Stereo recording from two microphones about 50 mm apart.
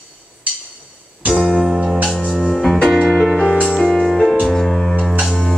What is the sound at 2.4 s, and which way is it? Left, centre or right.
Music, centre.